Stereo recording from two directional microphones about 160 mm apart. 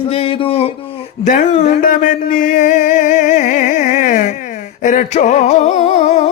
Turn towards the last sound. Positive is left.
turn(degrees=45)  # may be behind; listen again after turning